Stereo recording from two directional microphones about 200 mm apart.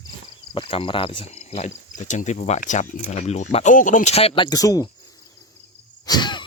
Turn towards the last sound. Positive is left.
turn(degrees=20)  # may be behind; listen again after turning